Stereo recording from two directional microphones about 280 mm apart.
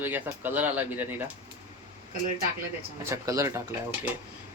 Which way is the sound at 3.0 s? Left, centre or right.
Centre.